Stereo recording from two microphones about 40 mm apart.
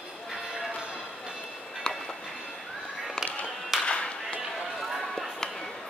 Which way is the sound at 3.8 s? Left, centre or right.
Left.